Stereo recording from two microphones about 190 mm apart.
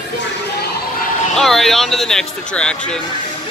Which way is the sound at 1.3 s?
Centre (ahead or behind).